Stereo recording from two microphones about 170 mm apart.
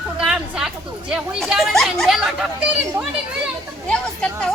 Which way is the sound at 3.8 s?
5° left (ahead or behind).